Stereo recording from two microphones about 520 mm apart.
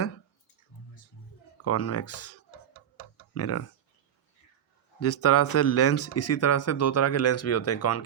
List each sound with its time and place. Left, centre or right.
1.6 s speech: left
4.9 s speech: left